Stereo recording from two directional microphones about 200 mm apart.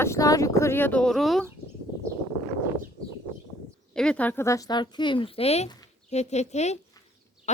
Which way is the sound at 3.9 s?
5° left (ahead or behind).